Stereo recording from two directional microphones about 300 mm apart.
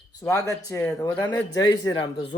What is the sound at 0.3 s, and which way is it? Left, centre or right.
Speech, centre.